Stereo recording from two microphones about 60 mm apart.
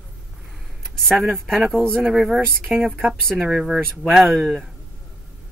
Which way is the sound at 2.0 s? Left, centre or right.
Centre.